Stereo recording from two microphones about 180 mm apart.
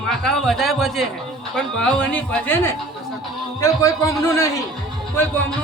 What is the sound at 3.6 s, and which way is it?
Speech, 20° left (ahead or behind).